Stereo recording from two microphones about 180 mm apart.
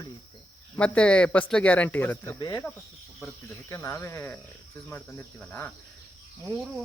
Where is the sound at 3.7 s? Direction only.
15° left (ahead or behind).